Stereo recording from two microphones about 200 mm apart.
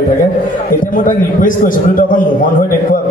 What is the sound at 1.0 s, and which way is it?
A man's voice, 45° left (ahead or behind).